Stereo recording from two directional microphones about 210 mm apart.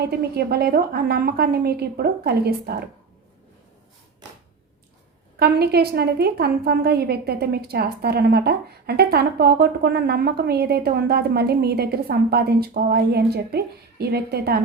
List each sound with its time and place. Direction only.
0.0 s a woman's voice: 50° right (ahead or behind)
5.4 s a woman's voice: 50° right (ahead or behind)